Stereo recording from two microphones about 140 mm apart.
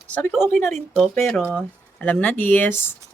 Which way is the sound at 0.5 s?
60° right (ahead or behind).